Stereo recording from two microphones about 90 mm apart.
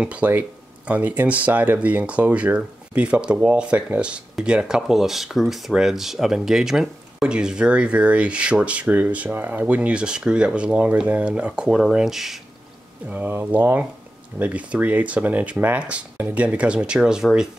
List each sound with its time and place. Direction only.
0.0 s speech: 15° right (ahead or behind)
13.1 s speech: 20° right (ahead or behind)